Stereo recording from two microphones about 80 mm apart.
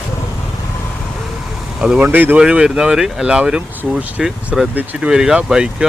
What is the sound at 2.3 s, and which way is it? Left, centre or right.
Speech, centre.